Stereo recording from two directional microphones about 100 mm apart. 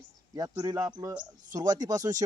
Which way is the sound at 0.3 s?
40° right (ahead or behind).